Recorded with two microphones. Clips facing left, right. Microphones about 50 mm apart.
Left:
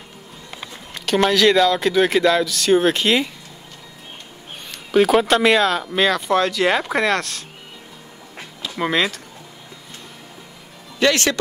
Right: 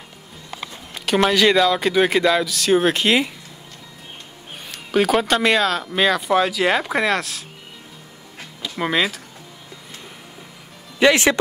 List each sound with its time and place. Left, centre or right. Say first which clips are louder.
1.0 s speech: left 1 dB; centre
4.6 s speech: left 3 dB; centre
8.7 s speech: left 1 dB; centre
11.0 s speech: right 3 dB; centre